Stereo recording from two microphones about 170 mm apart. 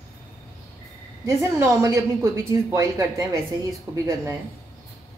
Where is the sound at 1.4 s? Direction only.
15° right (ahead or behind).